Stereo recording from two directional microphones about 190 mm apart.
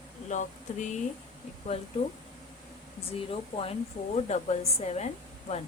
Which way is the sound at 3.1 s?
30° left (ahead or behind).